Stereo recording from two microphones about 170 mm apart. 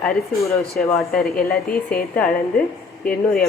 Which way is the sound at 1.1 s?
60° left (ahead or behind).